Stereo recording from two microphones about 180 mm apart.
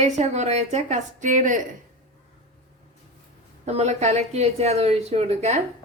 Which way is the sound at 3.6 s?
40° right (ahead or behind).